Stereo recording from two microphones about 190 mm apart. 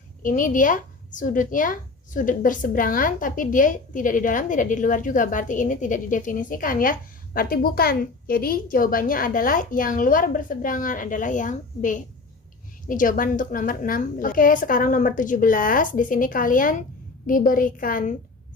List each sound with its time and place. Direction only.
0.2 s a woman's voice: 45° left (ahead or behind)